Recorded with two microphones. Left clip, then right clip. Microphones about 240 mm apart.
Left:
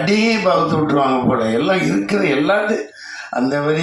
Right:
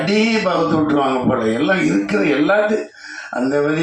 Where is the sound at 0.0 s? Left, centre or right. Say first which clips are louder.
Left 1 dB; left.